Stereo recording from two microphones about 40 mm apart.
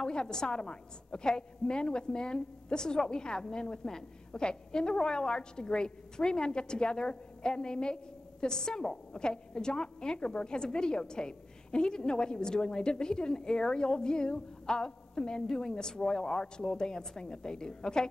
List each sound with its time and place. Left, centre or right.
0.0 s a woman's voice: left